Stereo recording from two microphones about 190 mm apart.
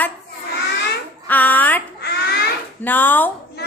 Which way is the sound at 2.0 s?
60° left (ahead or behind).